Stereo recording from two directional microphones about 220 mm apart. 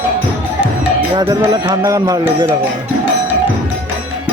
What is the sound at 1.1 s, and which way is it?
Speech, 20° right (ahead or behind).